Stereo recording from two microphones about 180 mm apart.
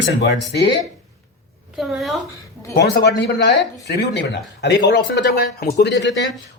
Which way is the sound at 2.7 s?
70° left (ahead or behind).